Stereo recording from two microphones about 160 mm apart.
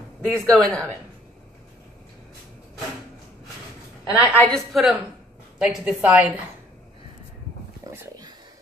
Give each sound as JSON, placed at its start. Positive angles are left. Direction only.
{"t": 0.2, "sound": "speech", "side_deg": 5}
{"t": 4.4, "sound": "a woman's voice", "side_deg": 0}